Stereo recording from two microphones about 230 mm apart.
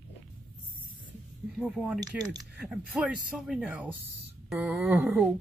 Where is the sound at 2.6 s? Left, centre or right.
Centre.